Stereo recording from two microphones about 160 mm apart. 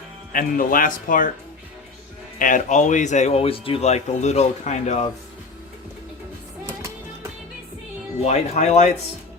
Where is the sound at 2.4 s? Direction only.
55° left (ahead or behind).